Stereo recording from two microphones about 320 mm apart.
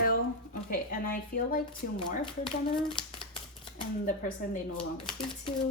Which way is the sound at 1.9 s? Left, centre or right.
Centre.